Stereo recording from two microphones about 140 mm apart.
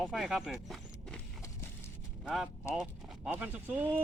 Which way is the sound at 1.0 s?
Centre (ahead or behind).